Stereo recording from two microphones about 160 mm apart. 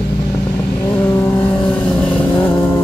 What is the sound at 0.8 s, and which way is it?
Vehicle, 15° left (ahead or behind).